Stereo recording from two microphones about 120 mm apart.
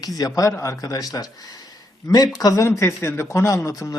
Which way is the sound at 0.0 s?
30° left (ahead or behind).